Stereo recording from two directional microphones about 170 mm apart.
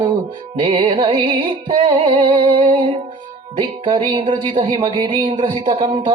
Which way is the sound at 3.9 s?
30° right (ahead or behind).